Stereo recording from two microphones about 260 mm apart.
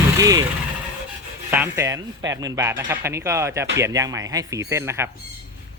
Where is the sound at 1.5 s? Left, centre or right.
Centre.